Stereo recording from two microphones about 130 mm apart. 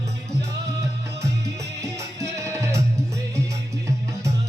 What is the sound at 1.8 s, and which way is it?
Music, 25° right (ahead or behind).